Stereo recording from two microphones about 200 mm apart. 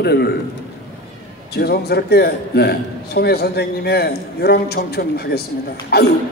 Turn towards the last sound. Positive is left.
turn(degrees=55)  # may be behind; listen again after turning